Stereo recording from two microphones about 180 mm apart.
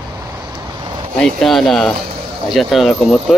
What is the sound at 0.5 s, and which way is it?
Vehicle, 25° right (ahead or behind).